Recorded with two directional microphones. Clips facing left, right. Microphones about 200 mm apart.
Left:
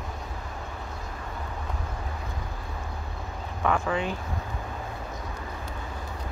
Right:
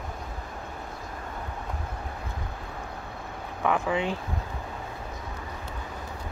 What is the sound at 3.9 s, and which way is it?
Speech, 20° right (ahead or behind).